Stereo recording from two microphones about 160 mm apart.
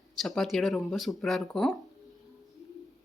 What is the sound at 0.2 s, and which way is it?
Speech, centre (ahead or behind).